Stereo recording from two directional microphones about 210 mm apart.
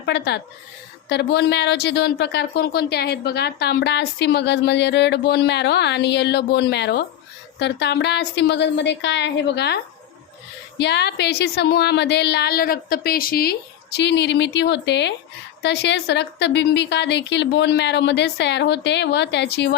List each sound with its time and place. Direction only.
0.0 s a woman's voice: 55° left (ahead or behind)